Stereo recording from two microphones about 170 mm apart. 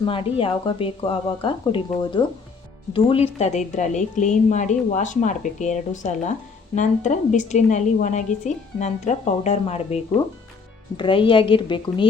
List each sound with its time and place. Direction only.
0.0 s a woman's voice: 30° left (ahead or behind)